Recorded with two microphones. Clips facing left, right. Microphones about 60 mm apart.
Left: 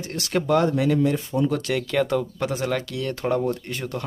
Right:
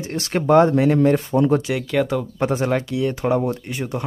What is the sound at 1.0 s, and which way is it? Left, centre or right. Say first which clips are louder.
Speech: right 6 dB; right.